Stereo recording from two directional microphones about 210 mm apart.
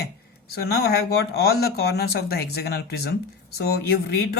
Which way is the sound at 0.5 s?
50° left (ahead or behind).